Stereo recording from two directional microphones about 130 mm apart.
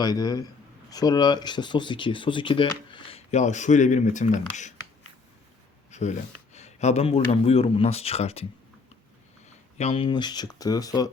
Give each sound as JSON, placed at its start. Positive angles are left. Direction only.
{"t": 0.0, "sound": "speech", "side_deg": 30}
{"t": 3.2, "sound": "speech", "side_deg": 65}
{"t": 5.9, "sound": "speech", "side_deg": 60}
{"t": 9.7, "sound": "speech", "side_deg": 50}